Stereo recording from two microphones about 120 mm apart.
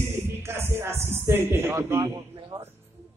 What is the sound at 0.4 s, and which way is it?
A man's voice, 20° right (ahead or behind).